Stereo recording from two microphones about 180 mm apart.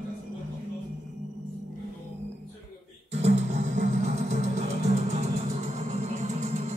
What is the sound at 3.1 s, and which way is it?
Music, 35° right (ahead or behind).